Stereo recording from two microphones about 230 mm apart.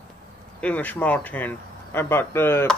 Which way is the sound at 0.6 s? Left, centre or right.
Centre.